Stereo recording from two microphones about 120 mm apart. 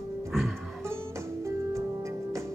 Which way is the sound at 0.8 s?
20° right (ahead or behind).